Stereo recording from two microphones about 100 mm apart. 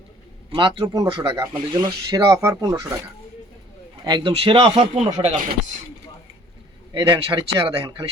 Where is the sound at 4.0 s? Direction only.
50° right (ahead or behind); by 5.3 s 80° right.